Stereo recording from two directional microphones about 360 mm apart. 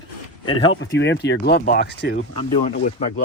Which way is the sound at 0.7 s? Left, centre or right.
Left.